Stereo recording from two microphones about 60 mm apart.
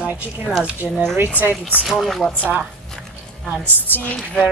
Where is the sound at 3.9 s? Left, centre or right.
Left.